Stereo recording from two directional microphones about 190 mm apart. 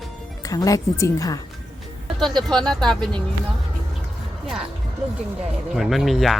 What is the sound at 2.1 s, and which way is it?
Speech, centre (ahead or behind).